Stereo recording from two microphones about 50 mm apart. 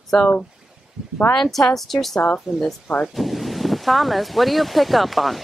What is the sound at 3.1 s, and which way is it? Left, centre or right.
Speech, centre.